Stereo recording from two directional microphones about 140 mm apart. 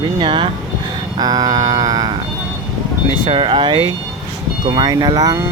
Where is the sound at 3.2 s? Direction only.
40° right (ahead or behind).